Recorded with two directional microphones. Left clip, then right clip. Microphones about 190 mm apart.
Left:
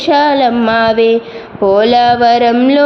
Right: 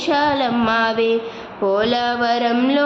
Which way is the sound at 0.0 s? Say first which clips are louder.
Left 8 dB; 25° left (ahead or behind).